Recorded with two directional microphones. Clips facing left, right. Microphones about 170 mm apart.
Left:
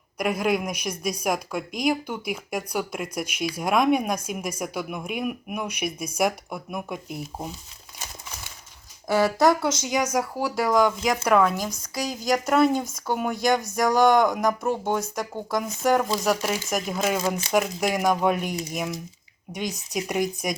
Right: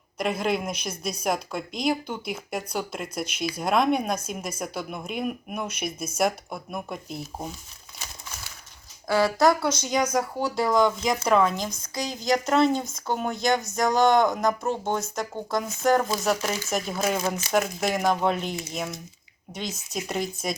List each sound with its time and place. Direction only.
0.2 s a woman's voice: 10° left (ahead or behind)
9.0 s a woman's voice: 20° left (ahead or behind)
16.2 s speech: centre (ahead or behind)
16.5 s a woman's voice: 10° left (ahead or behind)